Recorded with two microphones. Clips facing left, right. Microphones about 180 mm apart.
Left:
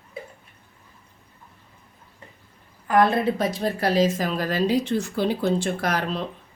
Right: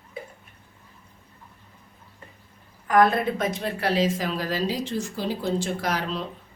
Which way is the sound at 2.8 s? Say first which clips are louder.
Left 1 dB; 30° left (ahead or behind).